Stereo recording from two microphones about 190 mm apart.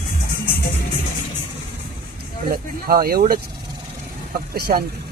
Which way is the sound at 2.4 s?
50° right (ahead or behind).